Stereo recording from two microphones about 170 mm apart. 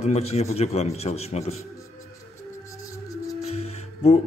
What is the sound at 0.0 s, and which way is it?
A man's voice, 40° left (ahead or behind).